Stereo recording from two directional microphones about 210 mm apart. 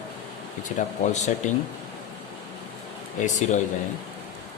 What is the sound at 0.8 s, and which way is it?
Speech, 35° left (ahead or behind).